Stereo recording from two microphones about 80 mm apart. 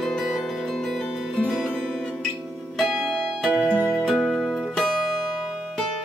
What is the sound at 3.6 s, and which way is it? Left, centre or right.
Music, right.